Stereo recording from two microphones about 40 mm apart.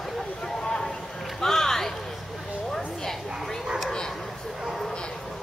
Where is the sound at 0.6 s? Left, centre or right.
Centre.